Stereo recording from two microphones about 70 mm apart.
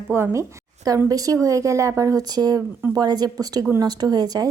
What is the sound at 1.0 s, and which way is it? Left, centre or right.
A woman's voice, right.